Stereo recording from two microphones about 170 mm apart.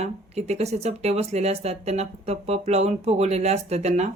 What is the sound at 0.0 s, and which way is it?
Speech, 40° right (ahead or behind).